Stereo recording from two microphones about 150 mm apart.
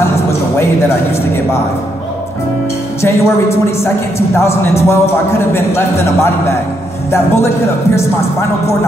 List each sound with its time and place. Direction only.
0.3 s a man's voice: 15° left (ahead or behind)
3.0 s a man's voice: 15° left (ahead or behind)